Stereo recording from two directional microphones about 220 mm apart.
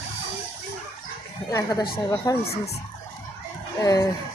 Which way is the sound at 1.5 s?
15° left (ahead or behind).